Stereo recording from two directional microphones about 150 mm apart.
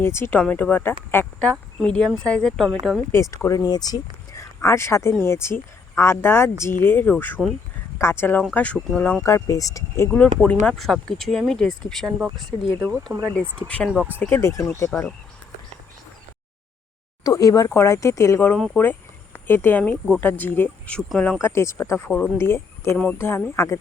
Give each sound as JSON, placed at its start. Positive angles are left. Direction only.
{"t": 0.0, "sound": "speech", "side_deg": 15}
{"t": 1.5, "sound": "speech", "side_deg": 5}
{"t": 3.1, "sound": "speech", "side_deg": 20}
{"t": 9.2, "sound": "speech", "side_deg": 20}
{"t": 10.4, "sound": "speech", "side_deg": 10}
{"t": 13.1, "sound": "speech", "side_deg": -20}
{"t": 13.7, "sound": "speech", "side_deg": 10}
{"t": 13.9, "sound": "speech", "side_deg": -5}
{"t": 14.2, "sound": "speech", "side_deg": 15}
{"t": 17.2, "sound": "speech", "side_deg": 25}
{"t": 18.5, "sound": "speech", "side_deg": 5}
{"t": 21.4, "sound": "speech", "side_deg": 20}